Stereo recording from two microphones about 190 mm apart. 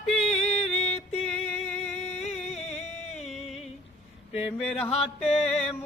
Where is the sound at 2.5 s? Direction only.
35° left (ahead or behind).